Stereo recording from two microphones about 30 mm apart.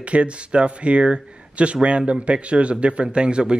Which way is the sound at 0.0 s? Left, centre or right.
Right.